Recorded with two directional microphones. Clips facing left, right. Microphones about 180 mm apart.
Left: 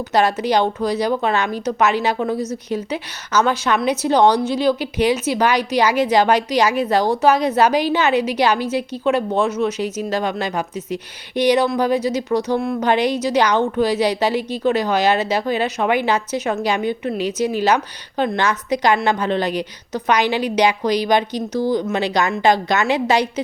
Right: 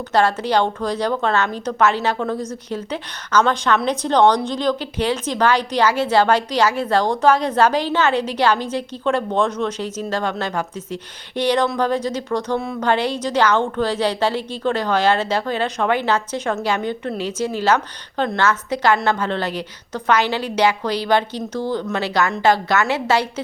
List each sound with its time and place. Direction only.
0.1 s a woman's voice: 10° left (ahead or behind)